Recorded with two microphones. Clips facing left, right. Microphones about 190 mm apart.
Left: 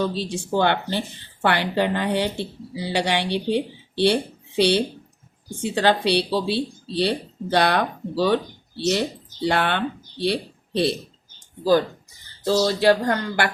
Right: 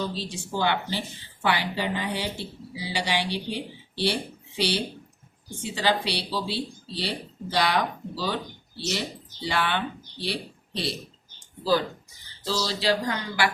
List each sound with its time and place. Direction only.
0.1 s speech: 60° left (ahead or behind)
12.5 s speech: 55° left (ahead or behind)